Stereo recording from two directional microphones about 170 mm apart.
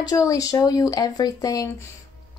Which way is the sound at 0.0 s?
20° left (ahead or behind).